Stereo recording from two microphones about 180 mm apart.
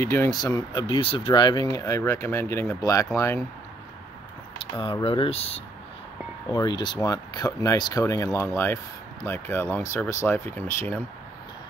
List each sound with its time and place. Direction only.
0.0 s speech: 15° left (ahead or behind)
5.0 s speech: 30° left (ahead or behind); by 11.0 s 10° left (ahead or behind)